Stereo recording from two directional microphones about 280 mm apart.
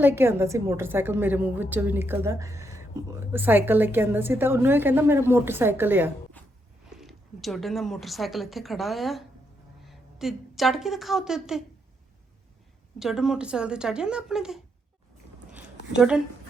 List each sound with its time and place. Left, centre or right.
0.0 s a woman's voice: centre
6.4 s a sound: centre
6.9 s a woman's voice: centre
13.0 s speech: centre